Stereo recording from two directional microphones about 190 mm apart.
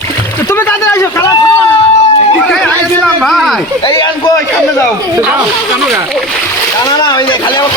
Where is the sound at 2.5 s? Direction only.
5° left (ahead or behind).